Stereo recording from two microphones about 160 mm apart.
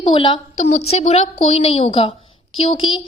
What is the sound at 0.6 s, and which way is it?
A woman's voice, 45° left (ahead or behind).